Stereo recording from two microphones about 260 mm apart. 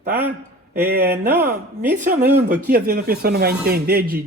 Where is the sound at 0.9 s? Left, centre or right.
Right.